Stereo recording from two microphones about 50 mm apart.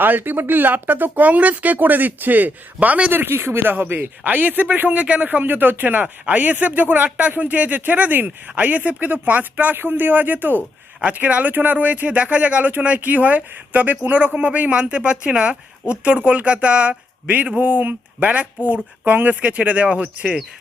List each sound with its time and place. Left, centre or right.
0.0 s speech: right
3.1 s speech: right
4.9 s speech: right
9.7 s speech: right